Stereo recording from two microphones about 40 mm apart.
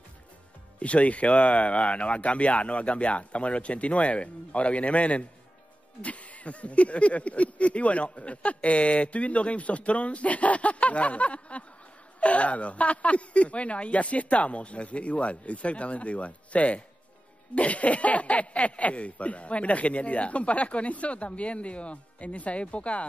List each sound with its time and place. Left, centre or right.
0.7 s speech: left